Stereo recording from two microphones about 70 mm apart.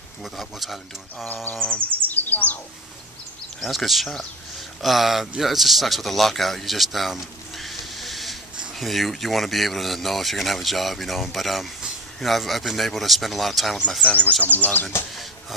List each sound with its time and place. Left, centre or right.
0.2 s speech: centre
1.2 s speech: left
1.8 s bird: right
2.0 s bird: left
3.6 s speech: centre
14.5 s speech: left